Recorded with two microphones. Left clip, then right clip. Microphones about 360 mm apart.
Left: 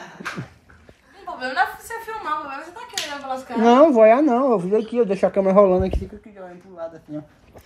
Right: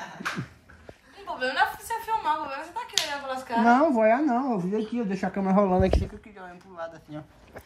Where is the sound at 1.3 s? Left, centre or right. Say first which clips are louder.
Left 4 dB; centre.